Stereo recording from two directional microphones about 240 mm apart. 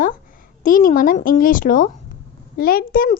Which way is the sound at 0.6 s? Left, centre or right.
Left.